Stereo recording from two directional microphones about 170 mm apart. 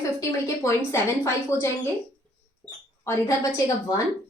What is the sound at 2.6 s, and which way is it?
Mouse, 10° left (ahead or behind).